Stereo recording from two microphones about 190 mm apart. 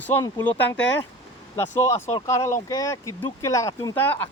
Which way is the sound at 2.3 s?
15° left (ahead or behind).